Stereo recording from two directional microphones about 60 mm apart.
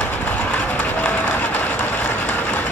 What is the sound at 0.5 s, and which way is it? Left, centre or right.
Run, left.